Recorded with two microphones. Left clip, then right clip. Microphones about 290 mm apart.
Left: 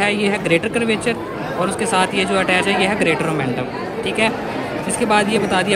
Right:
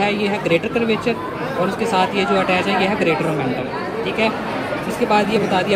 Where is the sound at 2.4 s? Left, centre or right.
Left.